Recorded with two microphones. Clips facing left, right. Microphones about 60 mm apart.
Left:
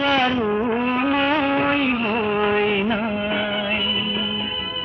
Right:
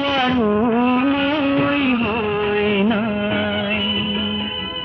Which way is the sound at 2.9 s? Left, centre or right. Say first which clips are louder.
Right 3 dB; centre.